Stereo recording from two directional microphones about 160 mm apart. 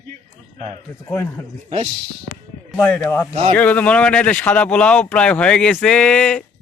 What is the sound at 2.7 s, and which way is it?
Speech, 5° left (ahead or behind).